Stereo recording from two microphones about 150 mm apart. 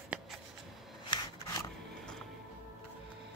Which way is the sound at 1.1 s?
25° left (ahead or behind).